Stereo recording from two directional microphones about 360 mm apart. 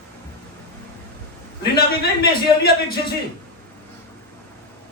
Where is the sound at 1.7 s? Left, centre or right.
Left.